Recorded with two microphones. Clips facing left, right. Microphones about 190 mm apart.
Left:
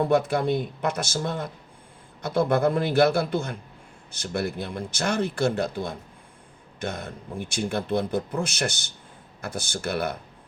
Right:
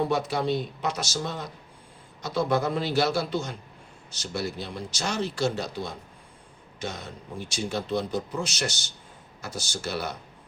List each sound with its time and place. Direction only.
0.0 s a man's voice: 55° left (ahead or behind)